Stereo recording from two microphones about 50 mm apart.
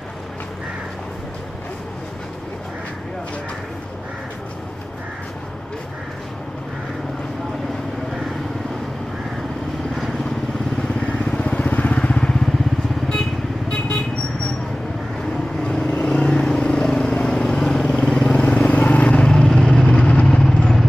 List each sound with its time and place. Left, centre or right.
10.8 s vehicle: left
12.0 s vehicle: centre
15.6 s vehicle: centre
18.7 s vehicle: left; by 20.0 s centre
20.0 s vehicle: left